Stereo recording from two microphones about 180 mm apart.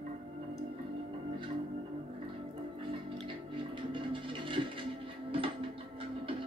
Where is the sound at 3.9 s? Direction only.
30° right (ahead or behind).